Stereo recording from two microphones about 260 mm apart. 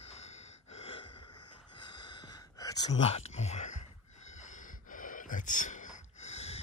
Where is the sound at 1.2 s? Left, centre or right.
Left.